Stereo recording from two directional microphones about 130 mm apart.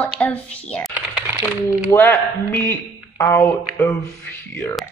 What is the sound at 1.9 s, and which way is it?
Speech, 15° left (ahead or behind).